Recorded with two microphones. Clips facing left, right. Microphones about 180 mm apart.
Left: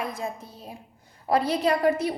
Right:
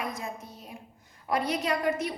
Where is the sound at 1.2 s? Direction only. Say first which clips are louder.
Left 5 dB; 30° left (ahead or behind).